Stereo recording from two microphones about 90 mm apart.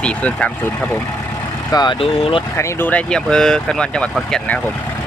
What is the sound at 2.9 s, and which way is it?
Speech, 10° left (ahead or behind).